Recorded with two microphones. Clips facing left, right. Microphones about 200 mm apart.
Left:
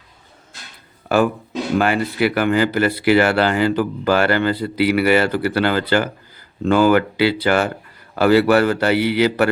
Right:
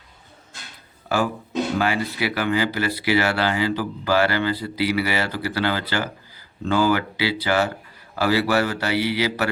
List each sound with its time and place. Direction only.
1.0 s speech: 55° left (ahead or behind)